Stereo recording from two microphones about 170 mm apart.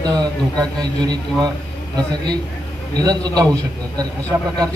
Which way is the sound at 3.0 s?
20° right (ahead or behind).